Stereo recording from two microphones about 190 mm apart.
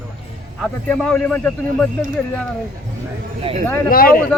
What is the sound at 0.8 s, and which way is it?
A man's voice, 5° left (ahead or behind).